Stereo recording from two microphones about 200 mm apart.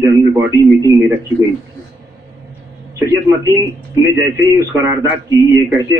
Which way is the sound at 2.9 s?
15° right (ahead or behind).